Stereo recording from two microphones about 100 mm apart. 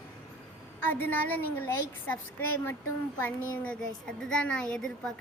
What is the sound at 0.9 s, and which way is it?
A woman's voice, 20° left (ahead or behind).